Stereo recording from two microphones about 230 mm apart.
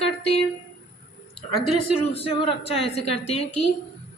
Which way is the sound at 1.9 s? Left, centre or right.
Left.